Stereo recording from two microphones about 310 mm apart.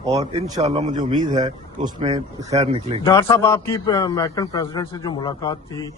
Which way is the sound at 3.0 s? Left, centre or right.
Centre.